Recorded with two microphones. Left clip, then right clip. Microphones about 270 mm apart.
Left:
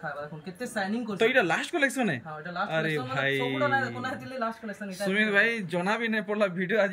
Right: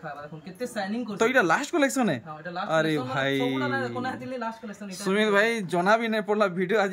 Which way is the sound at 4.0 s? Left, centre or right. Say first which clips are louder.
Right 1 dB; centre.